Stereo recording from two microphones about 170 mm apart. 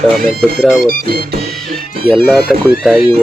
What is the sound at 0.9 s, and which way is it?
Speech, 65° right (ahead or behind).